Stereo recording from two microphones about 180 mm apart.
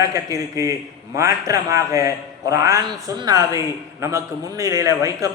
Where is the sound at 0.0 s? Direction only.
20° right (ahead or behind).